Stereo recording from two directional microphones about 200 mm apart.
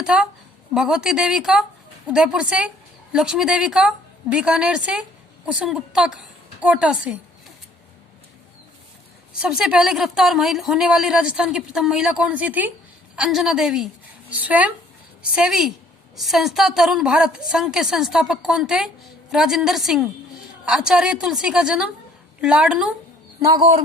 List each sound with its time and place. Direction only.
0.0 s a woman's voice: 5° right (ahead or behind)
9.4 s speech: 5° right (ahead or behind)
23.5 s a man's voice: 25° right (ahead or behind)